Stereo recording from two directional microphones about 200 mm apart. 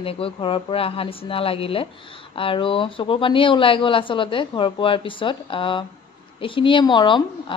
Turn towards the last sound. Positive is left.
turn(degrees=25)  # may be behind; listen again after turning